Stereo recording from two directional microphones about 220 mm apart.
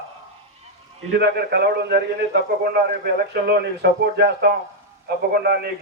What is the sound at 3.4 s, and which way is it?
A man's voice, 50° right (ahead or behind).